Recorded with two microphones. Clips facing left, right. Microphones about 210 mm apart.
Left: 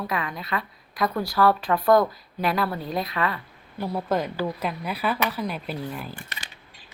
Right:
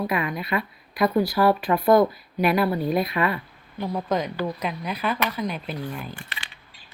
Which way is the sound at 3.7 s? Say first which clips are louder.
Even; 10° left (ahead or behind).